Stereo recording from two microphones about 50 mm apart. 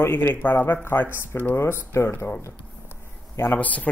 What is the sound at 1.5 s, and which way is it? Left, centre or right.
Speech, left.